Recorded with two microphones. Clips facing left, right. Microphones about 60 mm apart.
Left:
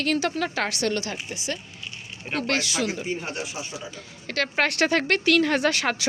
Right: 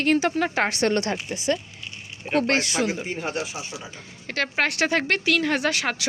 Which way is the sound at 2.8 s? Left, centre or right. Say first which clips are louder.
Right 2 dB; right.